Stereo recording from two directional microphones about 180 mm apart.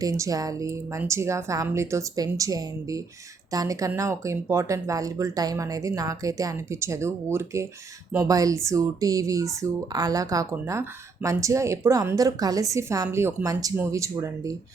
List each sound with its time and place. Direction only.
0.0 s speech: 20° right (ahead or behind)